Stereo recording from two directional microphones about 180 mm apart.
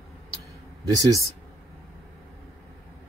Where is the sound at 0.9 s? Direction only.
20° right (ahead or behind).